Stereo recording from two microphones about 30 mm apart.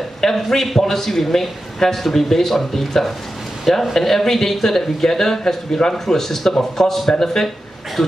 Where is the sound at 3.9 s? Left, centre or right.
Centre.